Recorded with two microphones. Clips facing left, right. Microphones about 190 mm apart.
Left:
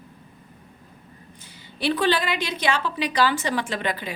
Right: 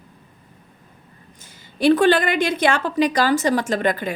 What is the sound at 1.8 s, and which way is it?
A woman's voice, 50° right (ahead or behind).